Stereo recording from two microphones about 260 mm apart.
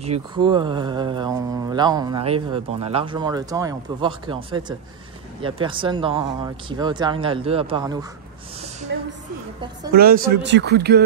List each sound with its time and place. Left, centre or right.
0.0 s speech: right
8.9 s a woman's voice: right